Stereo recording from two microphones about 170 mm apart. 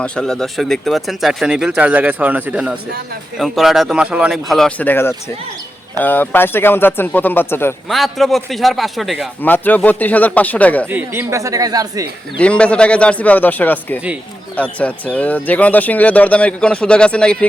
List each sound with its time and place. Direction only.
0.0 s speech: 5° left (ahead or behind)
7.9 s speech: centre (ahead or behind)
9.4 s speech: 10° left (ahead or behind)
10.8 s speech: 10° right (ahead or behind)
12.4 s speech: 5° left (ahead or behind)